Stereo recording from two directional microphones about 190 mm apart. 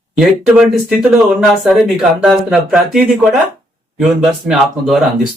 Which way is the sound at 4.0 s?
Centre (ahead or behind).